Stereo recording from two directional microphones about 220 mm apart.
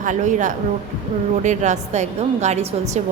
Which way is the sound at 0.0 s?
35° right (ahead or behind).